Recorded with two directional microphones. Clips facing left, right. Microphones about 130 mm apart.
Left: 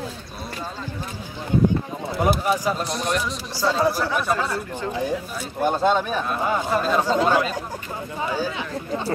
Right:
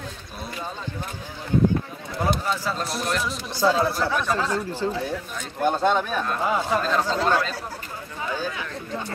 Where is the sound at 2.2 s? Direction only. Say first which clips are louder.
Left 4 dB; 15° left (ahead or behind).